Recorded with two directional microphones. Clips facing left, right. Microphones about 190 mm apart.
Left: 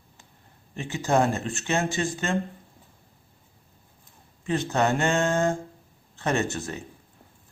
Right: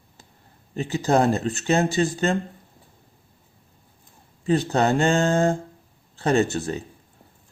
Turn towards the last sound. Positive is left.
turn(degrees=-35)  # may be behind; listen again after turning